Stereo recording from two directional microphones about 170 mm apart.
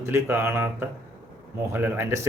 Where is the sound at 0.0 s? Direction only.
15° right (ahead or behind).